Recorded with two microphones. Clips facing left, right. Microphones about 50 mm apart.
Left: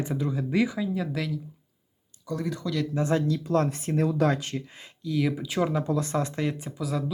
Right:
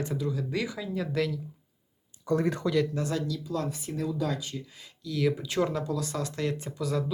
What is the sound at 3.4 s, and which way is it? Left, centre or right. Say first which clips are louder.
Speech: left 7 dB; left.